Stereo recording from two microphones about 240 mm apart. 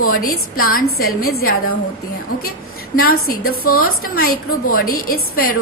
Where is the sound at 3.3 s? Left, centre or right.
Left.